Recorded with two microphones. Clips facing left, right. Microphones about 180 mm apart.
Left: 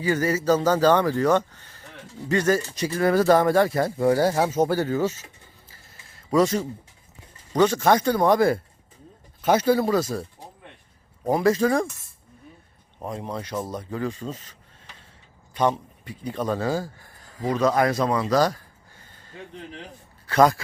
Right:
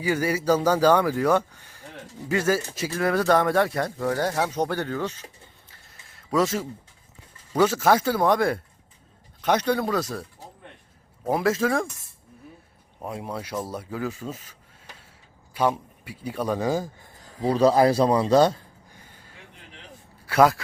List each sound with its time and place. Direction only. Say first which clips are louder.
0.0 s speech: left 1 dB; 10° right (ahead or behind)
3.9 s speech: left 7 dB; 10° left (ahead or behind)
5.6 s a sound: left 2 dB; centre (ahead or behind)
7.5 s speech: left 1 dB; 5° right (ahead or behind)
11.3 s speech: left 3 dB; centre (ahead or behind)
13.0 s speech: left 1 dB; 5° right (ahead or behind)
15.5 s speech: left 1 dB; 10° right (ahead or behind)
17.4 s a man's voice: right 3 dB; 30° right (ahead or behind)
18.9 s a sound: left 3 dB; 10° right (ahead or behind)
20.2 s speech: even; 5° right (ahead or behind)